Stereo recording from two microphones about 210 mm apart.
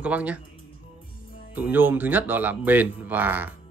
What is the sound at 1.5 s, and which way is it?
Speech, 10° right (ahead or behind).